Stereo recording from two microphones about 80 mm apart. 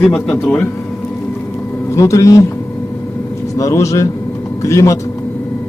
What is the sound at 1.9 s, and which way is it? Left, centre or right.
Speech, left.